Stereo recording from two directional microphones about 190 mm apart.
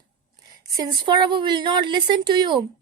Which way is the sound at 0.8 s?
25° right (ahead or behind).